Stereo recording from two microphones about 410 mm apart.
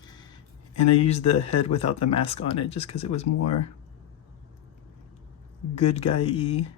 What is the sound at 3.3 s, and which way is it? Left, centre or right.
Speech, left.